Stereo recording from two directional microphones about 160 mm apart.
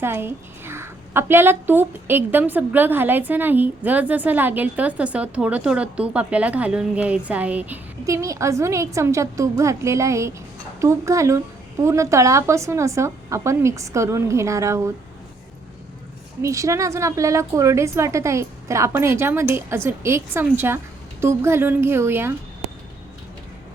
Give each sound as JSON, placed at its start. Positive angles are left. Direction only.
{"t": 0.0, "sound": "a woman's voice", "side_deg": -15}
{"t": 8.0, "sound": "a woman's voice", "side_deg": -20}
{"t": 16.4, "sound": "a woman's voice", "side_deg": -20}